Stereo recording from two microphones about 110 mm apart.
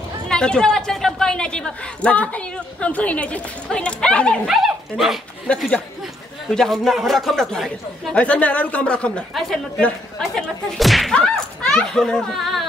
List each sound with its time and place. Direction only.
0.3 s speech: 5° left (ahead or behind)
4.5 s speech: 5° right (ahead or behind)
5.5 s speech: 10° left (ahead or behind)
8.2 s speech: 10° left (ahead or behind)